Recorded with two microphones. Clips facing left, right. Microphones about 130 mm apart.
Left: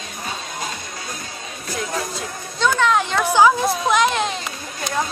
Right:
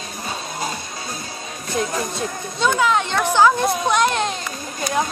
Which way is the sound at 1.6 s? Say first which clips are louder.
Right 3 dB; 25° right (ahead or behind).